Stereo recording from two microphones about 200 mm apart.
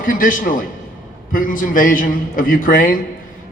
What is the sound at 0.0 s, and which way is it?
A man's voice, 45° left (ahead or behind).